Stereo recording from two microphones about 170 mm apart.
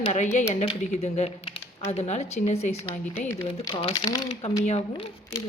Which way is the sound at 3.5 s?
30° left (ahead or behind).